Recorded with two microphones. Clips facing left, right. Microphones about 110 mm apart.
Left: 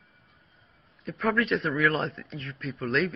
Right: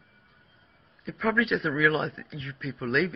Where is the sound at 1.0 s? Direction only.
Centre (ahead or behind).